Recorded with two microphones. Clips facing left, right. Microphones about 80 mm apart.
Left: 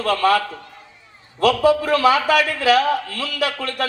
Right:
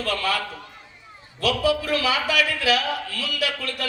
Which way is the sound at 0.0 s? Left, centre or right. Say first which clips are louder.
Left 8 dB; left.